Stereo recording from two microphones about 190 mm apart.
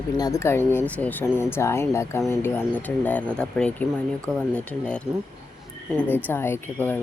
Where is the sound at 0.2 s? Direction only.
15° left (ahead or behind).